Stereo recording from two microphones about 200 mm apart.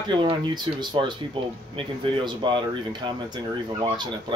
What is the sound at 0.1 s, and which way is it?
Speech, 25° right (ahead or behind).